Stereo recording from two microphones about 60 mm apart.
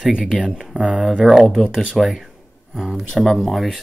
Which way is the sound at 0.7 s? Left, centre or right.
Right.